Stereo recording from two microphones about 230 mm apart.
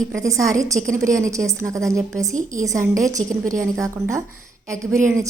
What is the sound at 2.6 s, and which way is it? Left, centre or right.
A woman's voice, centre.